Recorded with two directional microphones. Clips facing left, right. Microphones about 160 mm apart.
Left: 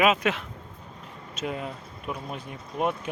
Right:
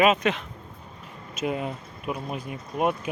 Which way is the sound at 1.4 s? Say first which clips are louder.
Right 4 dB; 10° right (ahead or behind).